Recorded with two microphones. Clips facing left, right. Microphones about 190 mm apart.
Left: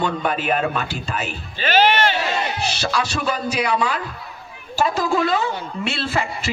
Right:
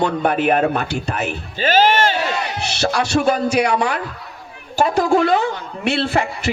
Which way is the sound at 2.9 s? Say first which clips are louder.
Right 7 dB; 55° right (ahead or behind).